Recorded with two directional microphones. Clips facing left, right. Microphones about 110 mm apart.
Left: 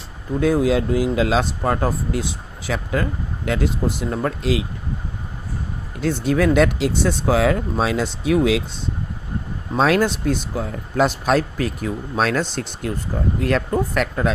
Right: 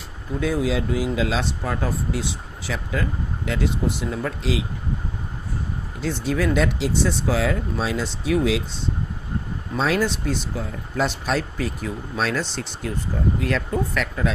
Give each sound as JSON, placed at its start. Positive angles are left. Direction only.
{"t": 0.3, "sound": "speech", "side_deg": 50}
{"t": 6.0, "sound": "speech", "side_deg": 55}
{"t": 9.7, "sound": "speech", "side_deg": 60}